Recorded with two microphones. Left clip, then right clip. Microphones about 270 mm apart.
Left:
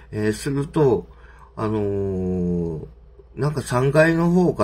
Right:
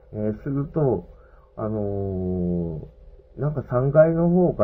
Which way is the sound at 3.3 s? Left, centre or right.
Left.